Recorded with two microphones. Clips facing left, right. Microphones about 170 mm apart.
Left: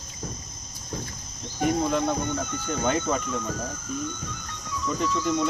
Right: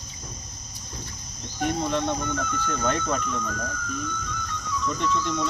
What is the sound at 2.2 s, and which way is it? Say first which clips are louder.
Speech: right 1 dB; 20° left (ahead or behind).